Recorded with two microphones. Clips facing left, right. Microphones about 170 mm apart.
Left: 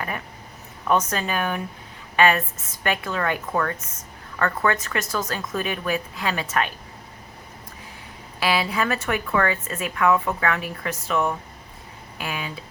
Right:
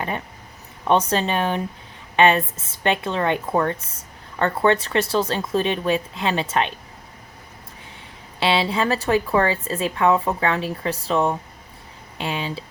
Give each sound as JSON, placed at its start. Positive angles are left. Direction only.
{"t": 0.9, "sound": "speech", "side_deg": -30}
{"t": 8.4, "sound": "speech", "side_deg": -25}